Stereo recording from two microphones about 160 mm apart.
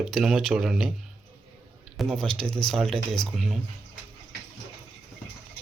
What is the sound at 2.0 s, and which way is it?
A man's voice, centre (ahead or behind).